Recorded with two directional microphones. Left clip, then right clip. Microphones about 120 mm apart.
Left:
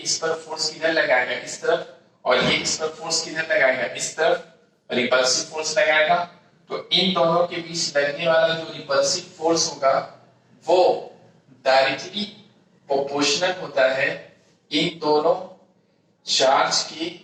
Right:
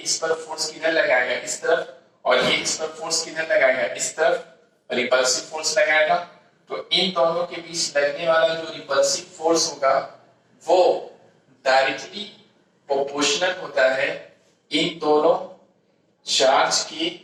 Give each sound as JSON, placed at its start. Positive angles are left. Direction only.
{"t": 0.0, "sound": "a man's voice", "side_deg": 35}